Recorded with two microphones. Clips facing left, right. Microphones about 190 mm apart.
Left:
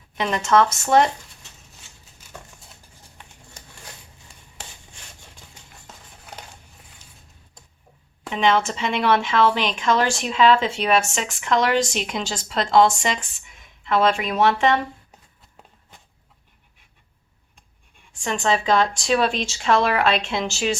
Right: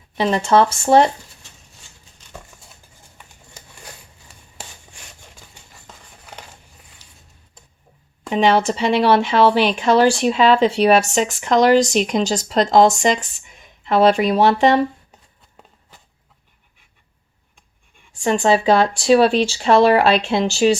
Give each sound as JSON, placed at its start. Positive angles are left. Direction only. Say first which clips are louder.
{"t": 0.2, "sound": "speech", "louder": "right 3 dB", "side_deg": -30}
{"t": 5.9, "sound": "crumpling", "louder": "right 1 dB", "side_deg": 0}
{"t": 8.3, "sound": "speech", "louder": "right 4 dB", "side_deg": -35}
{"t": 18.1, "sound": "speech", "louder": "right 6 dB", "side_deg": -35}